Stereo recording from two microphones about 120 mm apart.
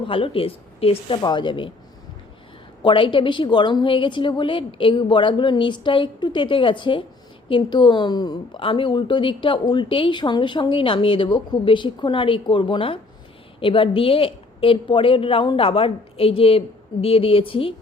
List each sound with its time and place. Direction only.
0.0 s a woman's voice: 50° left (ahead or behind)
2.8 s a woman's voice: 45° left (ahead or behind)